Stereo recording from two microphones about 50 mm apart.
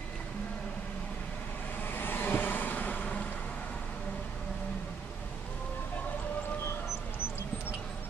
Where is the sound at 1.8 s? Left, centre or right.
Left.